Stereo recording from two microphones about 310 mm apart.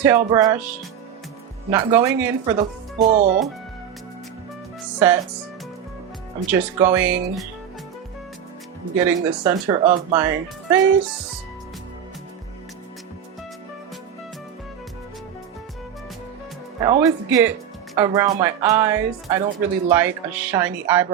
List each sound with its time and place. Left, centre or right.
0.0 s speech: centre
3.0 s speech: right
4.9 s speech: centre
6.5 s speech: centre
9.0 s speech: centre
9.8 s speech: right
10.2 s speech: centre
16.8 s speech: centre